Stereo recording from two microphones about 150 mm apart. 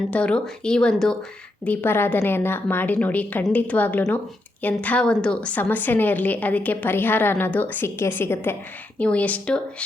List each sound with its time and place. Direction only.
0.1 s a woman's voice: 5° left (ahead or behind)